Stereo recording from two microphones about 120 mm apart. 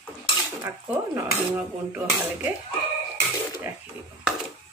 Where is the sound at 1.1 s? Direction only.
15° right (ahead or behind).